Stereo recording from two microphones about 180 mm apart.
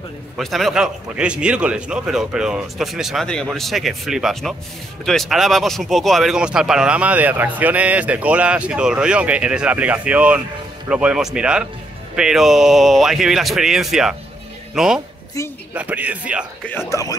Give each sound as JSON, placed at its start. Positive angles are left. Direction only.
{"t": 0.4, "sound": "a man's voice", "side_deg": 0}
{"t": 15.4, "sound": "speech", "side_deg": 15}
{"t": 15.7, "sound": "speech", "side_deg": -10}
{"t": 16.6, "sound": "speech", "side_deg": 15}